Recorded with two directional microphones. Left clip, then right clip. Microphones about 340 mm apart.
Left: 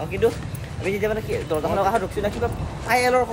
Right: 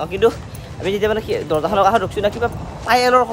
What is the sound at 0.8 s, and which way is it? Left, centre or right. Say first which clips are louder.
Speech: right 5 dB; centre.